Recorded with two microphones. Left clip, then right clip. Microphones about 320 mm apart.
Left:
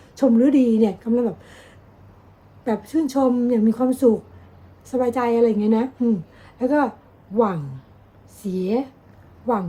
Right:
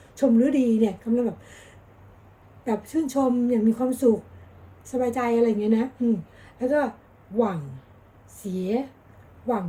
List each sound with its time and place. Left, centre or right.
0.2 s a woman's voice: centre